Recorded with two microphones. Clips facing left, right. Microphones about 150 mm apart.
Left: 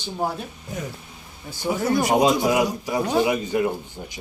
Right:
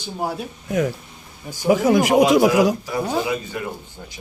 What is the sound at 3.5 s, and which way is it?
Speech, 20° left (ahead or behind).